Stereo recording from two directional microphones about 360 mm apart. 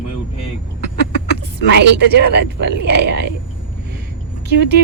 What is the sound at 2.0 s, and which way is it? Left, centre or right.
Speech, right.